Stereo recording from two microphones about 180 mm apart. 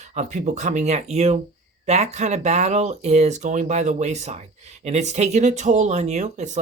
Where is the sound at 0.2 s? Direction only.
40° right (ahead or behind).